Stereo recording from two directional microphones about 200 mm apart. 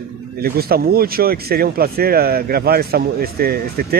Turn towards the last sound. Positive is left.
turn(degrees=-50)  # may be behind; listen again after turning